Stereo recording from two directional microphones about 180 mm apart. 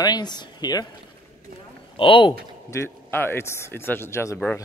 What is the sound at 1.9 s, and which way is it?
Speech, 30° left (ahead or behind).